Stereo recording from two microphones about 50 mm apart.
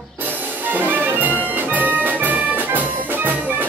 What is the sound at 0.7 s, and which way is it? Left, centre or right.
Music, right.